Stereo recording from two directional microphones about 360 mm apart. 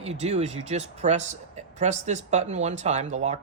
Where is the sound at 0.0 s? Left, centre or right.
Centre.